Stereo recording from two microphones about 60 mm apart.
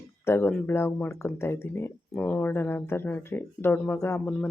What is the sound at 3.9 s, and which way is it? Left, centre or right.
Speech, left.